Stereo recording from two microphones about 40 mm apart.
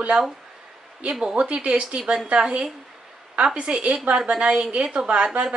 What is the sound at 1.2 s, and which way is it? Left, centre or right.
A woman's voice, right.